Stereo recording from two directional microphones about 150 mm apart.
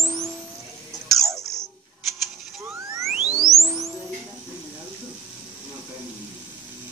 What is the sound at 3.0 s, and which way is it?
Chirp tone, 5° right (ahead or behind).